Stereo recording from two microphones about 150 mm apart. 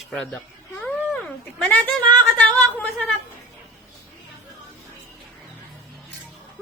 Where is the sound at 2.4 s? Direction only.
10° left (ahead or behind).